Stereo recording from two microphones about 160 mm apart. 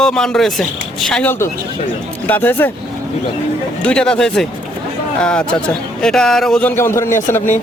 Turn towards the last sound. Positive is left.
turn(degrees=15)  # may be behind; listen again after turning